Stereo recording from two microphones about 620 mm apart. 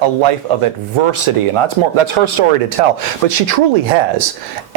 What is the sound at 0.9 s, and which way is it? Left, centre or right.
Speech, right.